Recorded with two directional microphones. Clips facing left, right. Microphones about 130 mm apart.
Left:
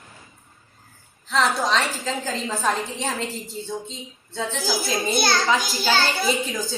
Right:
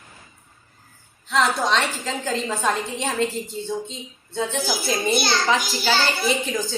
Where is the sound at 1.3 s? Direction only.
Centre (ahead or behind).